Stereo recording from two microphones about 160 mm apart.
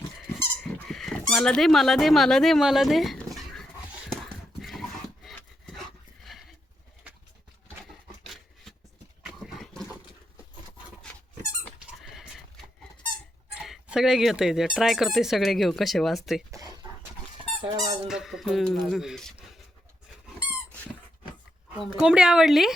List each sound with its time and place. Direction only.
0.3 s squeak: 5° left (ahead or behind)
4.6 s dog: centre (ahead or behind)
6.2 s horse: centre (ahead or behind)
8.2 s a sound: centre (ahead or behind)
9.4 s dog: centre (ahead or behind)
12.1 s horse: centre (ahead or behind)
13.6 s speech: 5° right (ahead or behind)
16.5 s a sound: 25° right (ahead or behind)
17.6 s speech: 30° right (ahead or behind)
18.1 s speech: centre (ahead or behind)
21.9 s speech: 5° right (ahead or behind)